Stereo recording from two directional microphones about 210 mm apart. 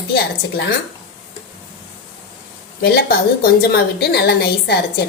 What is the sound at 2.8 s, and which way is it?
A woman's voice, 50° left (ahead or behind).